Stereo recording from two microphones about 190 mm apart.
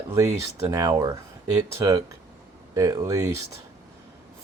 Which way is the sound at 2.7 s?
15° right (ahead or behind).